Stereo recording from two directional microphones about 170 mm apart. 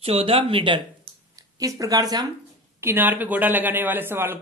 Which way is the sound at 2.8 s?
10° right (ahead or behind).